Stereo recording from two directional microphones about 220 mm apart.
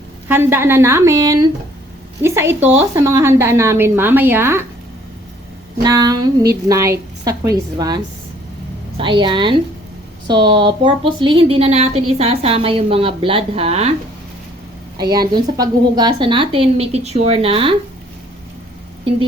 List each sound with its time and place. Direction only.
0.3 s a woman's voice: 10° right (ahead or behind)
5.8 s a woman's voice: 15° right (ahead or behind)
15.1 s speech: 20° right (ahead or behind)